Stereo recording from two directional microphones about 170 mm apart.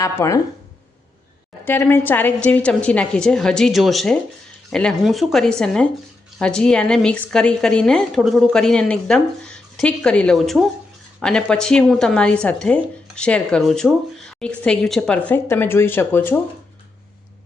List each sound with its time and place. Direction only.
0.0 s a woman's voice: 15° left (ahead or behind)
1.6 s a woman's voice: 15° left (ahead or behind)